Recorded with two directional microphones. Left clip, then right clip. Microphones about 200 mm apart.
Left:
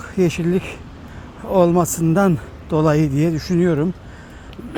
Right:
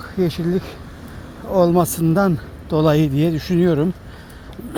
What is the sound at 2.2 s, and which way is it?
Speech, 30° left (ahead or behind).